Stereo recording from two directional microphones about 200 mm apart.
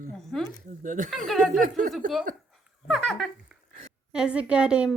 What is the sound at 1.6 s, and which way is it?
Speech, 40° right (ahead or behind).